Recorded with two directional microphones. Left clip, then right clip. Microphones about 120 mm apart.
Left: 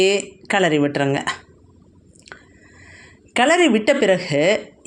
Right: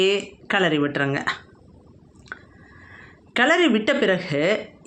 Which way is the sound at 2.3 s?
25° left (ahead or behind).